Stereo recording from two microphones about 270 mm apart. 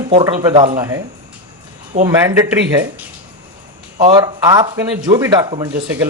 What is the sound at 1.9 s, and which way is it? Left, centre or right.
Speech, right.